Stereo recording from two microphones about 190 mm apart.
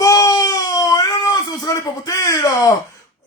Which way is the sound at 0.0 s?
20° left (ahead or behind).